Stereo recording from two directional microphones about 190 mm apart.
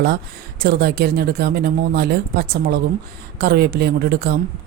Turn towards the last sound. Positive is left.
turn(degrees=-55)  # may be behind; listen again after turning